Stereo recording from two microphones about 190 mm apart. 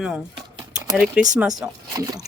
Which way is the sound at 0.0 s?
5° right (ahead or behind).